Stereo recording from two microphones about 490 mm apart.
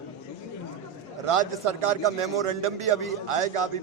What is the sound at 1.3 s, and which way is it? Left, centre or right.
A man's voice, right.